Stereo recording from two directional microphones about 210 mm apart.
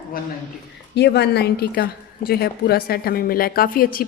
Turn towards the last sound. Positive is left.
turn(degrees=45)  # may be behind; listen again after turning